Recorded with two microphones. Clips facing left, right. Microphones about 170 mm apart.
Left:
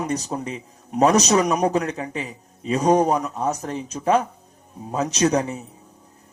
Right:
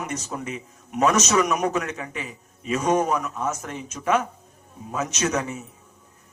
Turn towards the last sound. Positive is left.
turn(degrees=35)  # may be behind; listen again after turning